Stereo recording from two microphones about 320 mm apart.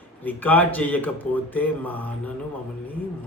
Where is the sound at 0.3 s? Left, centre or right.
Centre.